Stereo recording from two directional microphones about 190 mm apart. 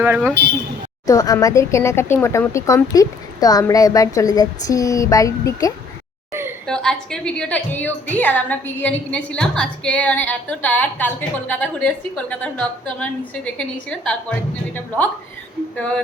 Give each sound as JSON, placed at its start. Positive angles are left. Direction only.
{"t": 0.0, "sound": "speech", "side_deg": -10}
{"t": 1.0, "sound": "speech", "side_deg": 20}
{"t": 6.7, "sound": "a woman's voice", "side_deg": 5}
{"t": 15.7, "sound": "speech", "side_deg": 5}